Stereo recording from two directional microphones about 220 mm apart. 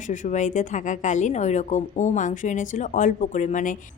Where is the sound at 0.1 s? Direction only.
35° left (ahead or behind).